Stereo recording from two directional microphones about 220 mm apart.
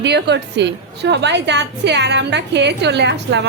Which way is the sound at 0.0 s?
50° right (ahead or behind).